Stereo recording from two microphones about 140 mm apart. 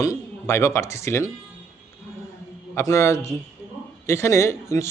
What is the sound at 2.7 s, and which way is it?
A man's voice, 20° left (ahead or behind).